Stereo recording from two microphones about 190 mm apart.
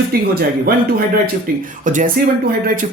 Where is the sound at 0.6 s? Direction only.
50° right (ahead or behind).